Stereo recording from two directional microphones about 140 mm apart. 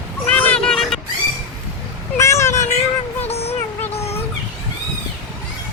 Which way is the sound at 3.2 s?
45° left (ahead or behind).